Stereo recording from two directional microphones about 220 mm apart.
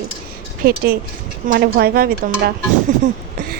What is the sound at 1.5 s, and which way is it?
Speech, 45° right (ahead or behind).